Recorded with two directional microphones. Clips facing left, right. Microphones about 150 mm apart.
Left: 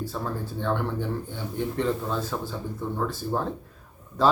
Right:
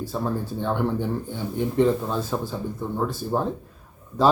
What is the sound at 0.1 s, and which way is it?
Speech, 15° right (ahead or behind).